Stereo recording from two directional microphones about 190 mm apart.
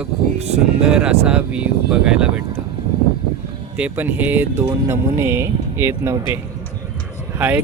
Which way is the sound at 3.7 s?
10° right (ahead or behind).